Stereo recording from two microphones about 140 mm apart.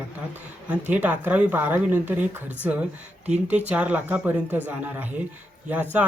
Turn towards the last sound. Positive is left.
turn(degrees=-10)  # may be behind; listen again after turning